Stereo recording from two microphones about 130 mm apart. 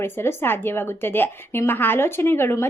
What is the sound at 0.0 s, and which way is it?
Speech, 20° left (ahead or behind).